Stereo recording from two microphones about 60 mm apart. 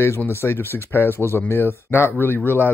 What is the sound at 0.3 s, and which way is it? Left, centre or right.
Speech, left.